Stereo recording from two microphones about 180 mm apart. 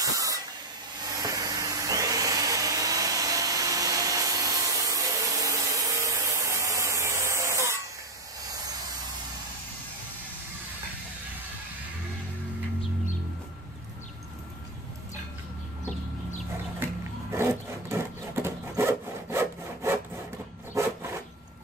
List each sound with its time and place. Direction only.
0.0 s spray: 20° right (ahead or behind)
1.2 s vacuum cleaner: 20° right (ahead or behind)
15.8 s chicken: 40° left (ahead or behind)
16.8 s a sound: 15° right (ahead or behind)